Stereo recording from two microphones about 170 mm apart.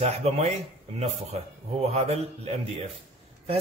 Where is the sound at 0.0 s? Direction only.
40° right (ahead or behind).